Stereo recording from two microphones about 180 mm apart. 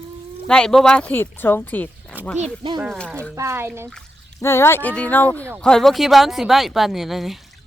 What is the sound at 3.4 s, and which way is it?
Speech, 15° right (ahead or behind).